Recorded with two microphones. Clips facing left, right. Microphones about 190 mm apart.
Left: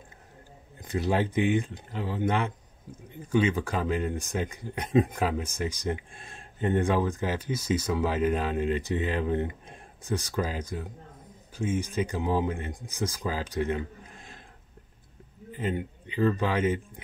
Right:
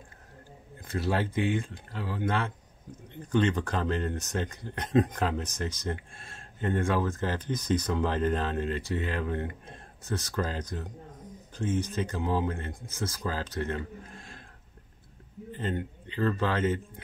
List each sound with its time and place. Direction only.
0.8 s speech: 15° left (ahead or behind)
15.5 s speech: 10° left (ahead or behind)